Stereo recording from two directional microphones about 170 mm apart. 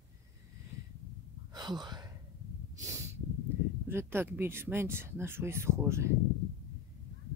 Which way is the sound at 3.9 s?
15° right (ahead or behind).